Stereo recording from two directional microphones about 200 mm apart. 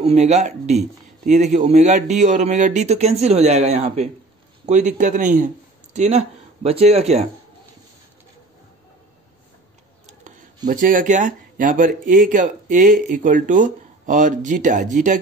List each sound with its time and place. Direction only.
0.0 s speech: 35° right (ahead or behind)
10.7 s speech: 40° right (ahead or behind)